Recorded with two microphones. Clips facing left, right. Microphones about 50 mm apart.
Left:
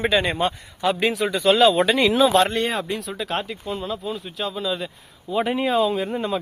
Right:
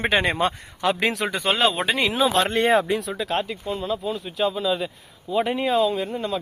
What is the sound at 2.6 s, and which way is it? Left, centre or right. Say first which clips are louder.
Speech: right 6 dB; centre.